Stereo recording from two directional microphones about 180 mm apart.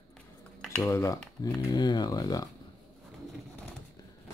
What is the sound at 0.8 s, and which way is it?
Cutlery, 15° left (ahead or behind).